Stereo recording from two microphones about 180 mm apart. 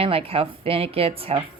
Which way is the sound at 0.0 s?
30° right (ahead or behind).